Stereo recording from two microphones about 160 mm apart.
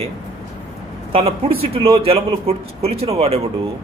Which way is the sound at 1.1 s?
35° right (ahead or behind).